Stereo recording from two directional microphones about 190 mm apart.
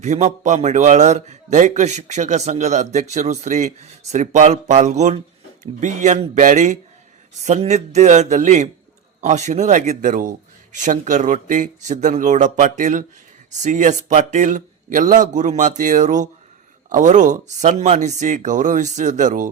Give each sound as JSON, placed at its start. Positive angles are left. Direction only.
{"t": 0.0, "sound": "a man's voice", "side_deg": -35}